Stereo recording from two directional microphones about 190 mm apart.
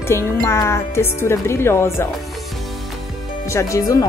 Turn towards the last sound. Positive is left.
turn(degrees=15)  # may be behind; listen again after turning